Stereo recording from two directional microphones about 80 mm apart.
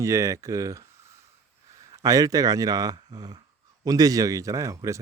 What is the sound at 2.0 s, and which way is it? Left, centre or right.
Speech, right.